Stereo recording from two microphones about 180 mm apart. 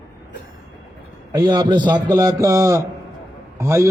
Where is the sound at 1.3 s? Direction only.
25° right (ahead or behind).